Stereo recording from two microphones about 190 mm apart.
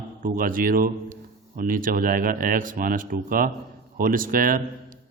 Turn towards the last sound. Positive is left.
turn(degrees=-45)  # may be behind; listen again after turning